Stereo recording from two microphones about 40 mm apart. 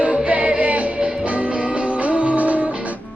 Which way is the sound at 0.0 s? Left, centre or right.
Right.